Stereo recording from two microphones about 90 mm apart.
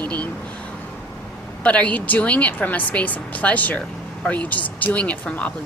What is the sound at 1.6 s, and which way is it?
Speech, 15° left (ahead or behind).